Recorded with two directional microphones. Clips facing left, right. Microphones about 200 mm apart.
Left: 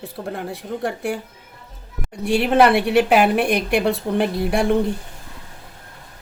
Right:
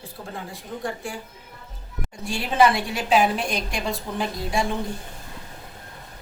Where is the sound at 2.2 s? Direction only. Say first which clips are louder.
Left 5 dB; 65° left (ahead or behind).